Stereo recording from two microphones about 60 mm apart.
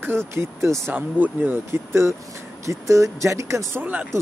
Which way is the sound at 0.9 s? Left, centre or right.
Right.